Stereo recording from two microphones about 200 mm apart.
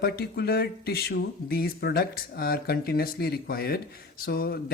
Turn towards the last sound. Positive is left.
turn(degrees=50)  # may be behind; listen again after turning